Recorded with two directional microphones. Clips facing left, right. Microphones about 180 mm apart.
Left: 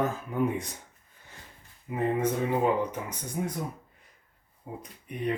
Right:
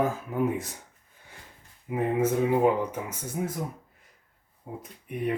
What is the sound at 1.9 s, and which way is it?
Speech, 5° right (ahead or behind).